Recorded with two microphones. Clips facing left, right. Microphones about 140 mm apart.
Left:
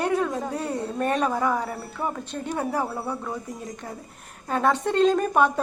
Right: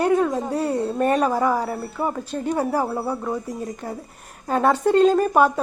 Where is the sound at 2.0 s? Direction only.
30° right (ahead or behind).